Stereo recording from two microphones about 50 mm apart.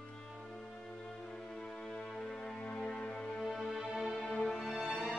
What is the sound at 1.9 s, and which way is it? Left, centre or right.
Music, centre.